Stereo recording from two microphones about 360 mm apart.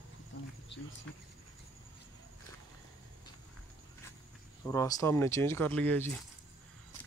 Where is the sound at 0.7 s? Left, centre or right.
Left.